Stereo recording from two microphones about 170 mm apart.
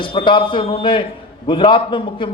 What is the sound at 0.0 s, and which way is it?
A man's voice, 30° left (ahead or behind).